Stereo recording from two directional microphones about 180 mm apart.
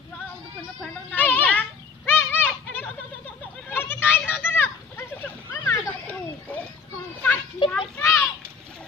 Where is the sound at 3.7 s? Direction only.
10° left (ahead or behind).